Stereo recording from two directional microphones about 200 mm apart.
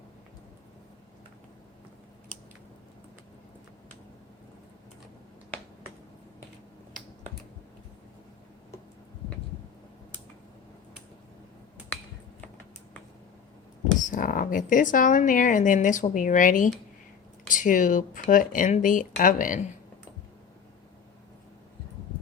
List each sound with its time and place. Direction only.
14.0 s speech: 40° left (ahead or behind)